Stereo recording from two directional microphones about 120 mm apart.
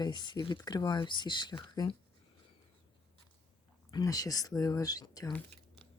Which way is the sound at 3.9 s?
30° left (ahead or behind).